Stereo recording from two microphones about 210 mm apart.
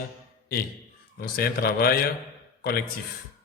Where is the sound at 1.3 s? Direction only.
45° left (ahead or behind).